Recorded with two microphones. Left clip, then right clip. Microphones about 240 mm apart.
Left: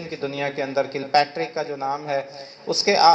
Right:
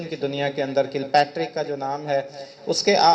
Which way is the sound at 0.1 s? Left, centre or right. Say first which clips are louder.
Right 1 dB; right.